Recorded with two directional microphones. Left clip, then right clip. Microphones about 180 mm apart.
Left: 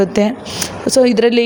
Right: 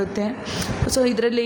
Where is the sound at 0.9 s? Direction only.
30° left (ahead or behind).